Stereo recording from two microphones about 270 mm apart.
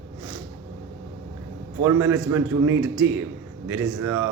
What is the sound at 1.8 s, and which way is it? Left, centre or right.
A man's voice, centre.